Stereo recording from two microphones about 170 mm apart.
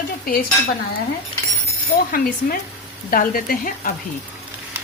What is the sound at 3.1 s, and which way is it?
Speech, 55° left (ahead or behind).